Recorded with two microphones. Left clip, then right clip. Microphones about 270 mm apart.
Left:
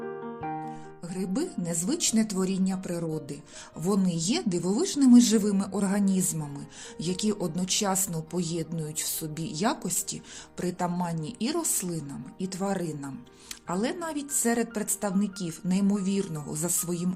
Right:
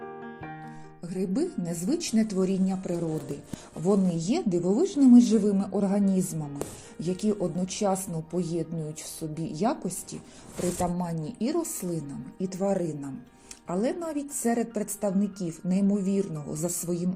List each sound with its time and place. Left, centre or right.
1.0 s speech: centre